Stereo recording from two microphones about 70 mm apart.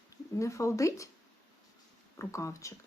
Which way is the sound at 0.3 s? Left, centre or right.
Left.